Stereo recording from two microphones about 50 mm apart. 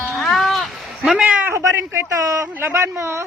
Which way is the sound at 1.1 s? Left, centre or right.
Right.